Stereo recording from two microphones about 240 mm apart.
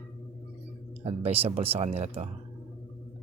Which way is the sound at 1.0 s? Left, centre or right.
Right.